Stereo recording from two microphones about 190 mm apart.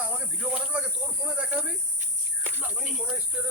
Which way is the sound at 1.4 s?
10° right (ahead or behind).